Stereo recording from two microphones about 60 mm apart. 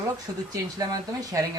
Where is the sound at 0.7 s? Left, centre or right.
Right.